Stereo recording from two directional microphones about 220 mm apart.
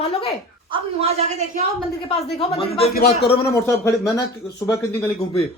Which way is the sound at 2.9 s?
45° left (ahead or behind).